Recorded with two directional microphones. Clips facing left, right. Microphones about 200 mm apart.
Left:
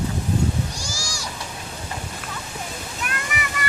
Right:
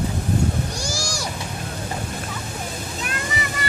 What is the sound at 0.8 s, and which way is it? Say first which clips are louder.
Goat: right 6 dB; 60° right (ahead or behind).